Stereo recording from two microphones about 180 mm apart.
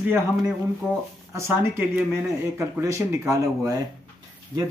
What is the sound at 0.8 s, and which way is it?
Speech, 5° right (ahead or behind).